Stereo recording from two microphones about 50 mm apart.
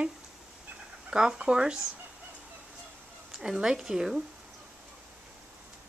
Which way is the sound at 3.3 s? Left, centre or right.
Centre.